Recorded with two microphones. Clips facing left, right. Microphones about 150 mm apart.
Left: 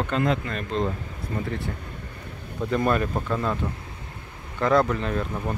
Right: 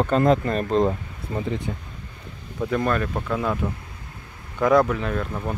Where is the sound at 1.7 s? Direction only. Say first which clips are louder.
Right 3 dB; 10° right (ahead or behind).